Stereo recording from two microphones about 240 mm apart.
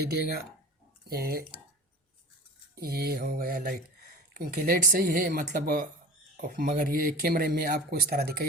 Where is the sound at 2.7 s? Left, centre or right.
Right.